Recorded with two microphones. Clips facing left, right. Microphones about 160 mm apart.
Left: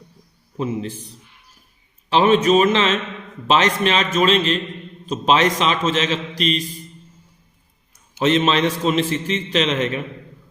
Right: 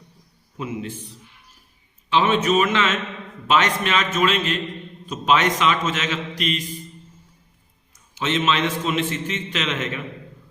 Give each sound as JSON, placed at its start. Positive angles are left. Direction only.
{"t": 0.5, "sound": "a man's voice", "side_deg": 30}
{"t": 2.0, "sound": "a man's voice", "side_deg": 35}
{"t": 8.2, "sound": "a man's voice", "side_deg": 35}